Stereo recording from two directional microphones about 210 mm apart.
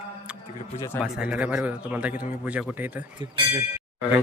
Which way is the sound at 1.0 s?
5° right (ahead or behind).